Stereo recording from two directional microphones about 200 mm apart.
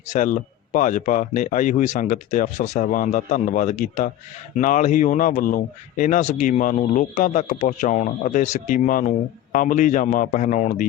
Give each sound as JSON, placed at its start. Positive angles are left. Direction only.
{"t": 0.1, "sound": "speech", "side_deg": 40}